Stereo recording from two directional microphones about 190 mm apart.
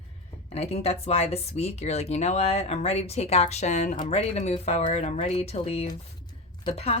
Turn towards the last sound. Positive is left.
turn(degrees=30)  # may be behind; listen again after turning